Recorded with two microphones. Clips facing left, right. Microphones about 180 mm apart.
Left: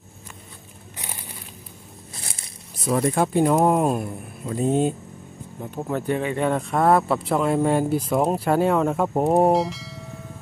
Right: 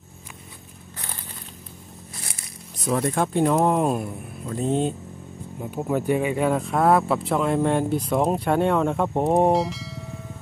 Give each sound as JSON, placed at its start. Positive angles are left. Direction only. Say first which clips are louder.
{"t": 2.1, "sound": "zipper", "louder": "left 1 dB", "side_deg": 25}
{"t": 2.8, "sound": "speech", "louder": "left 2 dB", "side_deg": 0}
{"t": 5.6, "sound": "speech", "louder": "right 2 dB", "side_deg": -5}